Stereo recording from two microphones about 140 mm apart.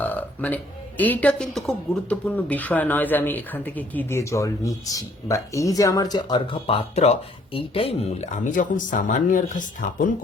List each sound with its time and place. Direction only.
0.0 s a woman's voice: 10° left (ahead or behind); by 10.1 s 65° left (ahead or behind)